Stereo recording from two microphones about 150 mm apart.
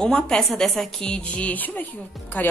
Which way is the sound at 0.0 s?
5° left (ahead or behind).